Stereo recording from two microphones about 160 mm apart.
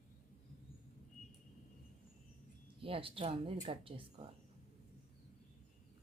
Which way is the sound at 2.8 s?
35° right (ahead or behind).